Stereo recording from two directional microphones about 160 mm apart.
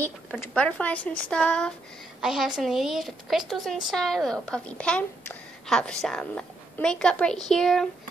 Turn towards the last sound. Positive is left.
turn(degrees=5)  # may be behind; listen again after turning